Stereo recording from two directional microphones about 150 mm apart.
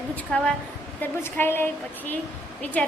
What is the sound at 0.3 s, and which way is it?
A woman's voice, 5° left (ahead or behind).